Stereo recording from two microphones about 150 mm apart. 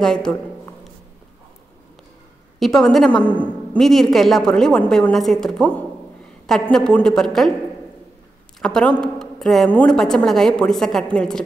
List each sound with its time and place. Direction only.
0.0 s speech: 5° left (ahead or behind)
2.6 s a woman's voice: centre (ahead or behind)
8.5 s a woman's voice: 5° left (ahead or behind)